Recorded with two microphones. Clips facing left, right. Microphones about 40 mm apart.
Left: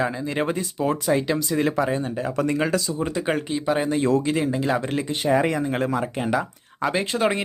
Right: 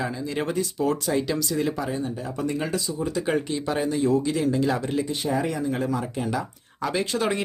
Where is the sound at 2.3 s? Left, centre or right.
Left.